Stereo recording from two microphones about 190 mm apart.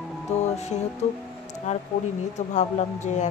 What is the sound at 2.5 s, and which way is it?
Speech, 40° left (ahead or behind).